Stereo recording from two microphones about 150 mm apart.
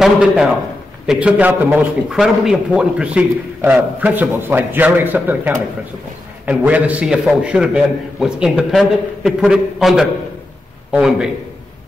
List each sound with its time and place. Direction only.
0.0 s a man's voice: 5° right (ahead or behind)